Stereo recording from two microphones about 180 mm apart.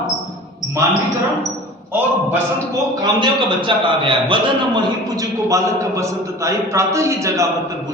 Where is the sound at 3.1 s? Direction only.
25° right (ahead or behind).